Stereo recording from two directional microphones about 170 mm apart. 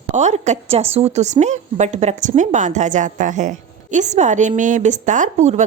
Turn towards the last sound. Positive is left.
turn(degrees=-45)  # may be behind; listen again after turning